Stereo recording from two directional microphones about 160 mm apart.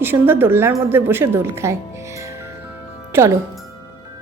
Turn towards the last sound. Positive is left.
turn(degrees=-15)  # may be behind; listen again after turning